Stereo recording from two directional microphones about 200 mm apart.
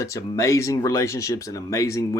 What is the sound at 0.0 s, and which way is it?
Speech, 15° left (ahead or behind).